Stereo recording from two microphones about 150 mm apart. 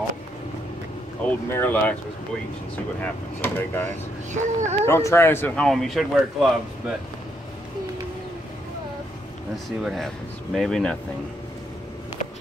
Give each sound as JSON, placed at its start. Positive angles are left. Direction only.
{"t": 1.2, "sound": "speech", "side_deg": 10}
{"t": 3.0, "sound": "speech", "side_deg": 10}
{"t": 4.3, "sound": "a child's voice", "side_deg": -55}
{"t": 4.8, "sound": "speech", "side_deg": 15}
{"t": 5.7, "sound": "speech", "side_deg": 0}
{"t": 9.8, "sound": "speech", "side_deg": 0}